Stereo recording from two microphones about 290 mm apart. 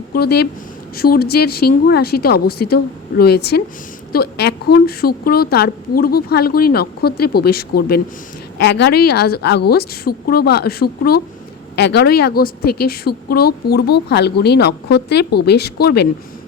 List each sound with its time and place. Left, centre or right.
0.1 s a woman's voice: left